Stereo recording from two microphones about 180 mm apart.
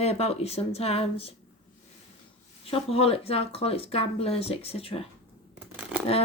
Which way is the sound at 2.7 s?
35° left (ahead or behind).